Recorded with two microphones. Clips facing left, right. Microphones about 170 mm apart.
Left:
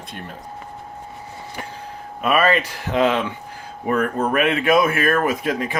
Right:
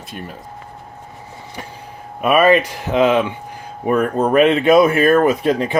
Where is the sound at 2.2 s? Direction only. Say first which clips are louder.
Right 5 dB; 15° right (ahead or behind).